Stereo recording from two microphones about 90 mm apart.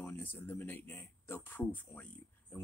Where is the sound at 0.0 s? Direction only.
25° left (ahead or behind).